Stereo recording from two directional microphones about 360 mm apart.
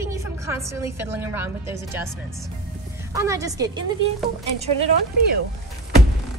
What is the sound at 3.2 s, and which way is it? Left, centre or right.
A woman's voice, centre.